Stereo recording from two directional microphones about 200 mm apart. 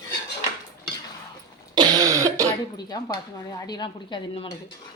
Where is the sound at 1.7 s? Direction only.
20° right (ahead or behind).